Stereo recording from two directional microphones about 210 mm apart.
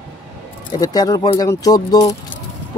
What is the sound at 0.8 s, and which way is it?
Speech, 20° left (ahead or behind).